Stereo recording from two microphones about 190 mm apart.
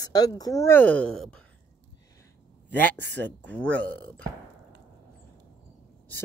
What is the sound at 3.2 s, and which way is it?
Speech, 5° left (ahead or behind).